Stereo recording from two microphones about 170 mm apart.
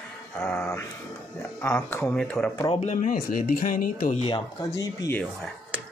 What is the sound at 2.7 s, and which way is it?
Speech, 45° left (ahead or behind).